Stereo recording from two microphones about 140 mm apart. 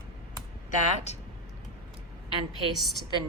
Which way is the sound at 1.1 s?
55° left (ahead or behind).